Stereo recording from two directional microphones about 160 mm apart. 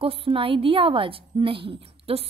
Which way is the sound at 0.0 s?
35° right (ahead or behind).